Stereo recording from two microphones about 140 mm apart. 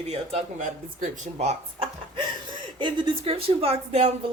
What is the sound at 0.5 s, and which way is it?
Speech, 65° right (ahead or behind).